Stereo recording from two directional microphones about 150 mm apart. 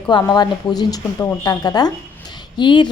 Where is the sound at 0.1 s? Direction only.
25° left (ahead or behind).